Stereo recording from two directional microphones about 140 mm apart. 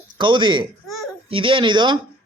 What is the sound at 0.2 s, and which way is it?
Speech, 35° right (ahead or behind).